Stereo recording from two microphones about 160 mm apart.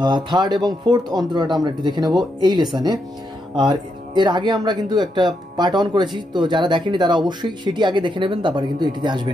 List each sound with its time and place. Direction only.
0.0 s speech: 30° right (ahead or behind)